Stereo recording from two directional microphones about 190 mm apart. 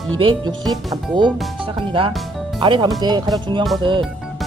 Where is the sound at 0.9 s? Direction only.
25° right (ahead or behind).